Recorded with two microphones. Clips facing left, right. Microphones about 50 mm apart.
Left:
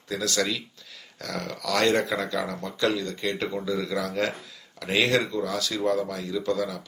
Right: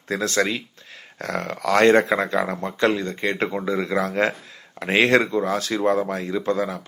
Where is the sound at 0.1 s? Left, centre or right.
Right.